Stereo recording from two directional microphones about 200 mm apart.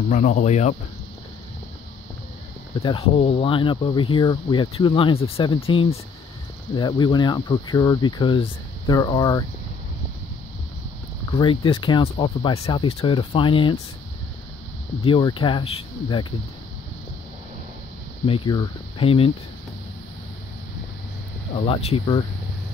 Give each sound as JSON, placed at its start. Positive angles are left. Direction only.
{"t": 0.1, "sound": "speech", "side_deg": 40}
{"t": 2.8, "sound": "speech", "side_deg": 25}
{"t": 11.3, "sound": "speech", "side_deg": 25}
{"t": 15.0, "sound": "speech", "side_deg": 25}
{"t": 18.2, "sound": "speech", "side_deg": 25}
{"t": 21.5, "sound": "speech", "side_deg": 30}